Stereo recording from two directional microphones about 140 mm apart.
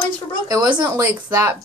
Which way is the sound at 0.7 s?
10° right (ahead or behind).